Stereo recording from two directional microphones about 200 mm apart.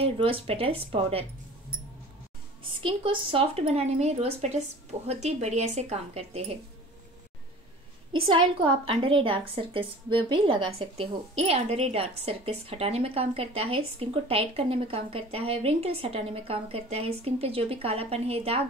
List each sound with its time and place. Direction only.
0.2 s a woman's voice: 30° right (ahead or behind)
2.8 s speech: 25° right (ahead or behind)
8.8 s a woman's voice: 25° right (ahead or behind)